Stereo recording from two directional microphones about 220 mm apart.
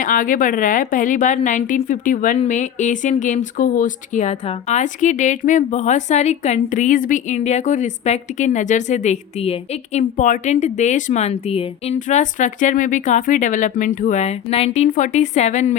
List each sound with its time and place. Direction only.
0.0 s a woman's voice: 40° left (ahead or behind)